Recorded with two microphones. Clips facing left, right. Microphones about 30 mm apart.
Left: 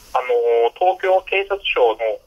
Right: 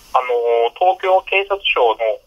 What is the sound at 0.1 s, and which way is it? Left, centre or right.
Telephone, centre.